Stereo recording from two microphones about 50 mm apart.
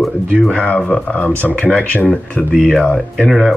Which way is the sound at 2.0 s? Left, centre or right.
Centre.